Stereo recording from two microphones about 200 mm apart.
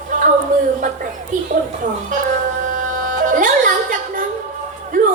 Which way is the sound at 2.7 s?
40° right (ahead or behind).